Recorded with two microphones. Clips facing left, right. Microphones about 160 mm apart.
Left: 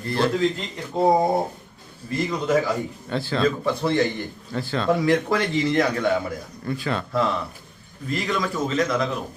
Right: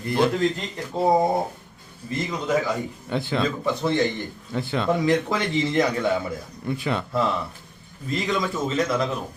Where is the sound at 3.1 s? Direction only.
20° right (ahead or behind).